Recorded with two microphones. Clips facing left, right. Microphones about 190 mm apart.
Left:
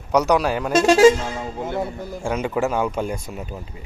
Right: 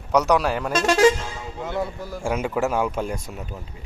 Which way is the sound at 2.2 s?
5° right (ahead or behind).